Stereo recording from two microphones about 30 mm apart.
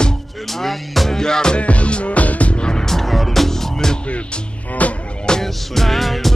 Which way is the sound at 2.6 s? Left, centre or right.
Left.